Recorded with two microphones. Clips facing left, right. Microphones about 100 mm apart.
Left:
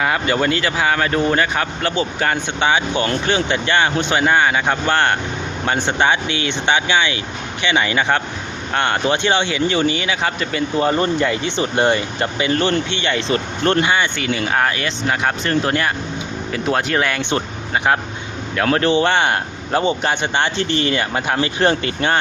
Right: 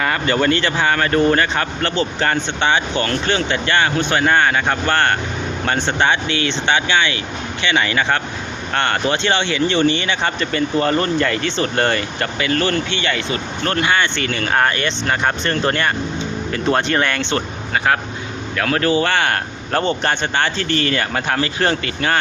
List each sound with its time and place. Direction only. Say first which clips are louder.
0.0 s speech: even; 10° left (ahead or behind); by 13.9 s 30° left (ahead or behind)
13.9 s speech: even; 15° left (ahead or behind)
18.5 s speech: left 1 dB; 25° left (ahead or behind)